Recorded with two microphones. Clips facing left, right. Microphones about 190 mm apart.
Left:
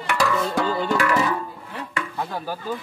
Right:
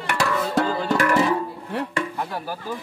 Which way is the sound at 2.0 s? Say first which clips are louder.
Right 1 dB; 10° right (ahead or behind).